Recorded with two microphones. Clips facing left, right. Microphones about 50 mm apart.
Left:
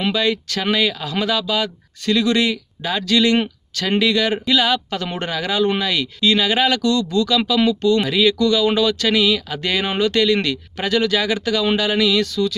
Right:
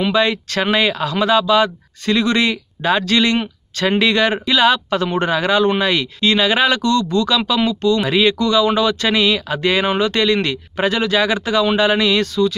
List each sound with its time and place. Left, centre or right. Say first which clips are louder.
0.1 s speech: right 3 dB; right
7.5 s speech: left 1 dB; right